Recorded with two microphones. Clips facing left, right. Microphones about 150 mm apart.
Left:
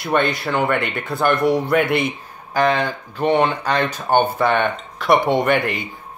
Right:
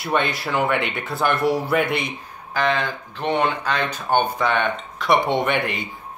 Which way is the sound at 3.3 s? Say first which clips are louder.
Left 2 dB; 55° left (ahead or behind).